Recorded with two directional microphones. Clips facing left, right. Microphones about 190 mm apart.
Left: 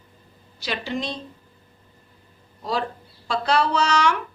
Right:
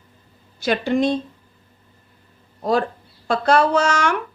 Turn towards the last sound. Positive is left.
turn(degrees=-50)  # may be behind; listen again after turning